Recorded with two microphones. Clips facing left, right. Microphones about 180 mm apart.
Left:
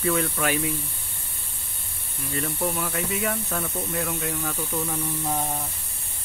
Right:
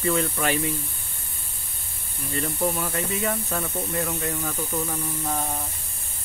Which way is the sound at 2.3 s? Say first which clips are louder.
Right 2 dB; centre (ahead or behind).